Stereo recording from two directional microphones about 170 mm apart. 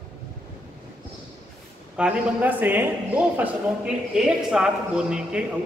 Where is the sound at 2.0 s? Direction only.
5° right (ahead or behind).